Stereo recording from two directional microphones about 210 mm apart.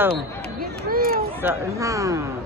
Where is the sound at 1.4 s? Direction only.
10° right (ahead or behind).